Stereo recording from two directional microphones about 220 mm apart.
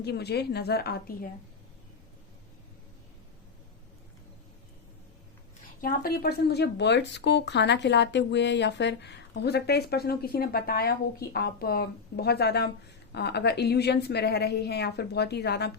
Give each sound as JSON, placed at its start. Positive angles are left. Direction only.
{"t": 0.0, "sound": "speech", "side_deg": 50}
{"t": 5.8, "sound": "speech", "side_deg": 40}